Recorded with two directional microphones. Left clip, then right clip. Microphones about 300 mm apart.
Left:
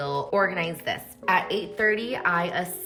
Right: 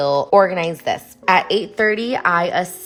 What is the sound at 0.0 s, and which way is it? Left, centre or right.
A woman's voice, centre.